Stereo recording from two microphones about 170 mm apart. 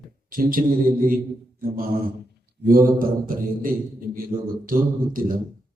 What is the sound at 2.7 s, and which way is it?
A man's voice, 55° right (ahead or behind).